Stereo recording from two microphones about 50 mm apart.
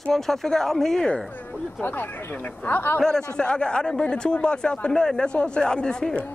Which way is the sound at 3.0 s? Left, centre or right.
Centre.